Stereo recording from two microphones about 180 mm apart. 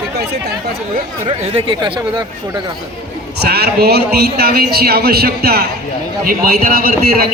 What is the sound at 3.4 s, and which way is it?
A man's voice, 60° right (ahead or behind).